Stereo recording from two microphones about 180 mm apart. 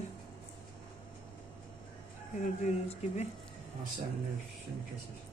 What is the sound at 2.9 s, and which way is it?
Speech, 35° left (ahead or behind).